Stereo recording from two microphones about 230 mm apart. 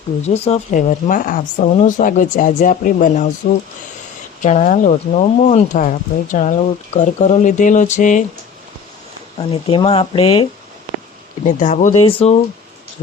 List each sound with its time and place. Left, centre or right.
0.4 s speech: left
4.4 s speech: left
9.4 s speech: left
11.4 s speech: left